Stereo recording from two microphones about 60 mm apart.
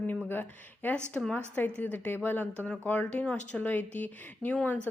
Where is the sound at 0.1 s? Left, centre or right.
Left.